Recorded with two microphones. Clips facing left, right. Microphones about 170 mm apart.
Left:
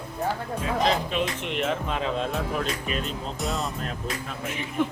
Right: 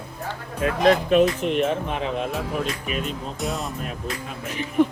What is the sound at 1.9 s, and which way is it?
Speech, 20° right (ahead or behind).